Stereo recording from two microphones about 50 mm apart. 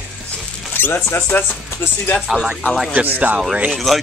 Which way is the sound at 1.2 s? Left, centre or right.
Left.